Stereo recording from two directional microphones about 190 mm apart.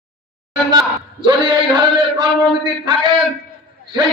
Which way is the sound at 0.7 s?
25° right (ahead or behind).